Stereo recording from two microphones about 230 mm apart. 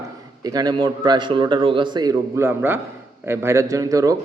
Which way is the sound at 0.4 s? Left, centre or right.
Centre.